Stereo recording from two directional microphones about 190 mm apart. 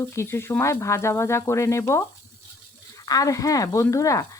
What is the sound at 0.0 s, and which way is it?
Speech, 15° left (ahead or behind).